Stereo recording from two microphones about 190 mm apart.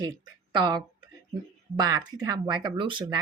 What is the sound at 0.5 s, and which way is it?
Speech, 25° right (ahead or behind).